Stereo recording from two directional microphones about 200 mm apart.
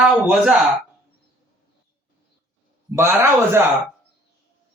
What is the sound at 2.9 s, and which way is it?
Speech, 10° right (ahead or behind).